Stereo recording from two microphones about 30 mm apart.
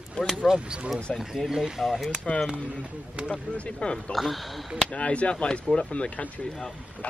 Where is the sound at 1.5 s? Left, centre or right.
Right.